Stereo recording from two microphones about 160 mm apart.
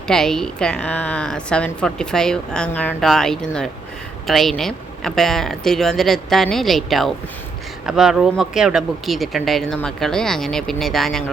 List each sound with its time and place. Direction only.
0.1 s a woman's voice: 5° left (ahead or behind)